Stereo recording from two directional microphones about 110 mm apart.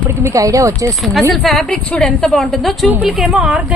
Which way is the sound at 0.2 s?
30° right (ahead or behind).